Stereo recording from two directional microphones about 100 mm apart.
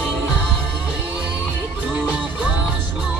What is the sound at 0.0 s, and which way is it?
Music, centre (ahead or behind).